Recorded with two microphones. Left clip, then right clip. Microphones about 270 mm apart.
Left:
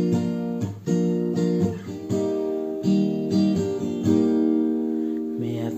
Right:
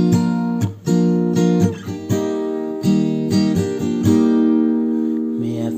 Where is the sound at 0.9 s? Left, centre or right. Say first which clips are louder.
Right 6 dB; right.